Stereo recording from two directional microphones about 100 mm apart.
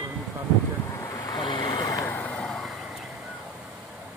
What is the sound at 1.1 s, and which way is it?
Vehicle, 40° left (ahead or behind).